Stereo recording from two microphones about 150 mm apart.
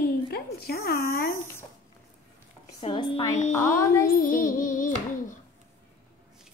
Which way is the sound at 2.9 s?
30° left (ahead or behind).